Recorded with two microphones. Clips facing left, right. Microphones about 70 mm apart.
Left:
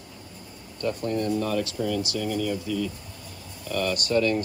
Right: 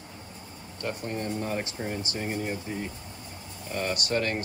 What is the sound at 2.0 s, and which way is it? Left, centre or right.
Speech, right.